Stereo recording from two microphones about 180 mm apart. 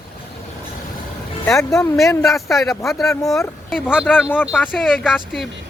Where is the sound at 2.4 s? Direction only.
Centre (ahead or behind).